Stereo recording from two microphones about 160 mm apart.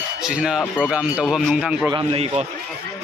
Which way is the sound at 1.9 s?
35° right (ahead or behind).